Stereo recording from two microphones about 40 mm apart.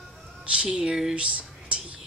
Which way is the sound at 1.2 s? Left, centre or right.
Right.